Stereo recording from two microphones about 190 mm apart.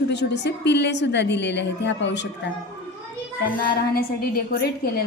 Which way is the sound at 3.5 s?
50° left (ahead or behind).